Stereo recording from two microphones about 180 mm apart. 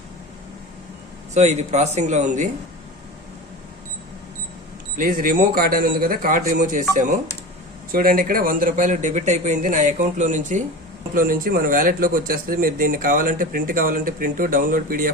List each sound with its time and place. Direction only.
1.3 s a man's voice: 40° right (ahead or behind)
4.9 s speech: 50° right (ahead or behind)